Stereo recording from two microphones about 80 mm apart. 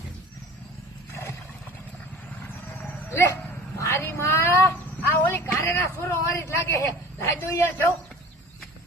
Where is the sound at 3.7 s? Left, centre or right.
Left.